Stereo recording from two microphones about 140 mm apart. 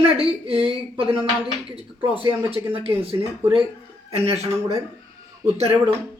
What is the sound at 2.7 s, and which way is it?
A man's voice, 40° right (ahead or behind).